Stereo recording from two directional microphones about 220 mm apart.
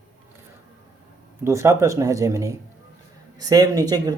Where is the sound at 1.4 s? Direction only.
15° right (ahead or behind).